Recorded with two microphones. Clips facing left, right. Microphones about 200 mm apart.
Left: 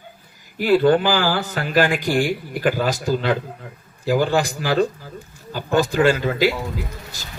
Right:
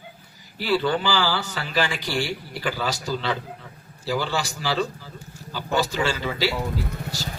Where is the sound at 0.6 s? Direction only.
50° left (ahead or behind).